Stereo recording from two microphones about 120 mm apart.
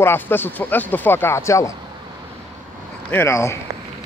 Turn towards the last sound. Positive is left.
turn(degrees=25)  # may be behind; listen again after turning